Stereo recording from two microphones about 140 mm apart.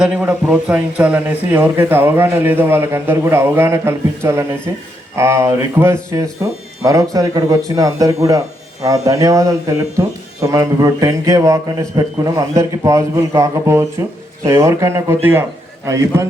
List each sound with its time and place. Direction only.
0.0 s a man's voice: 5° right (ahead or behind)